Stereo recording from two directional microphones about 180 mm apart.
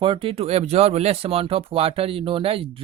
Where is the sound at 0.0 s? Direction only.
30° right (ahead or behind).